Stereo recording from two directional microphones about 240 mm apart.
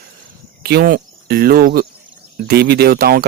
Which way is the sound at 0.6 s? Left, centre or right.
Right.